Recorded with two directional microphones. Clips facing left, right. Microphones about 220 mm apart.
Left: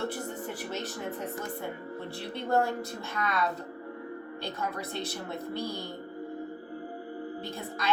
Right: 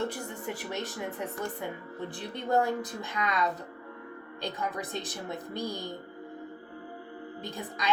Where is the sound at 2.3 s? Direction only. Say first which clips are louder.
Even; 15° right (ahead or behind).